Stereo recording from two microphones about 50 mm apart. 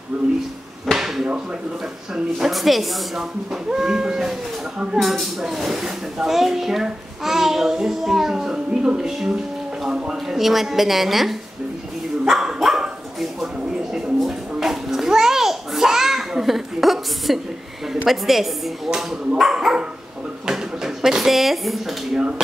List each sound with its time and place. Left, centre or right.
0.1 s speech: right
0.9 s a sound: centre
2.1 s a woman's voice: centre
3.7 s a woman's voice: centre
12.3 s dog: centre
13.2 s a sound: centre
18.0 s a woman's voice: centre